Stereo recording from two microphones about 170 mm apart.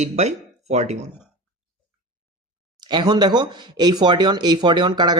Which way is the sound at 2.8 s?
25° right (ahead or behind).